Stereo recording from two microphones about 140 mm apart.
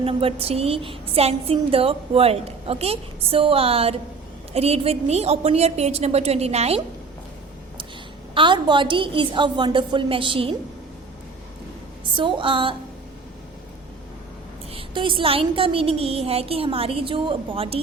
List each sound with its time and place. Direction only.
0.0 s a woman's voice: 45° right (ahead or behind)
8.4 s a woman's voice: 35° right (ahead or behind)
12.1 s a woman's voice: 35° right (ahead or behind)
14.7 s a woman's voice: 40° right (ahead or behind)